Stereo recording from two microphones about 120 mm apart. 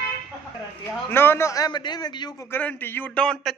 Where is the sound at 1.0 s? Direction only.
20° left (ahead or behind); by 2.4 s 35° left (ahead or behind).